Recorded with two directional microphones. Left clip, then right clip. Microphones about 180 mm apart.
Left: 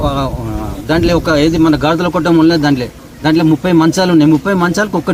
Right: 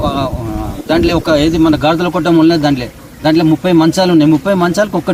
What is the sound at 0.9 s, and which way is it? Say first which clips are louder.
A man's voice: right 1 dB; centre (ahead or behind).